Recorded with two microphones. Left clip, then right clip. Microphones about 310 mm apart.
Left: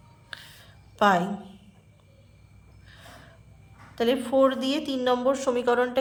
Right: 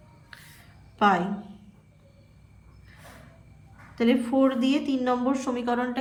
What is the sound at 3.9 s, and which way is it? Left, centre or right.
A woman's voice, centre.